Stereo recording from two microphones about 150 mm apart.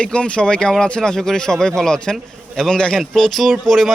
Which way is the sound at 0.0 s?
5° left (ahead or behind).